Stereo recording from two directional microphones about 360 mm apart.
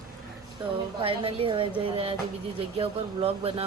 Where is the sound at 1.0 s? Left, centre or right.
Centre.